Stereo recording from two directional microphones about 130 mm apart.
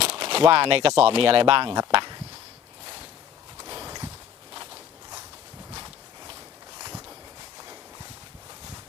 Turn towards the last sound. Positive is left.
turn(degrees=-30)  # may be behind; listen again after turning